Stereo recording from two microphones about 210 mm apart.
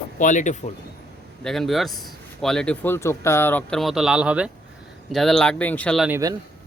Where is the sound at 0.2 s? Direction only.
35° left (ahead or behind).